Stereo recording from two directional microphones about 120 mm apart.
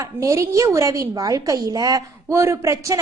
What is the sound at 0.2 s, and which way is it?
A woman's voice, 25° right (ahead or behind).